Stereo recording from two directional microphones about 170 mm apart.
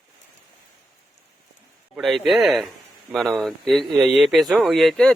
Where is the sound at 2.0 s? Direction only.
Centre (ahead or behind).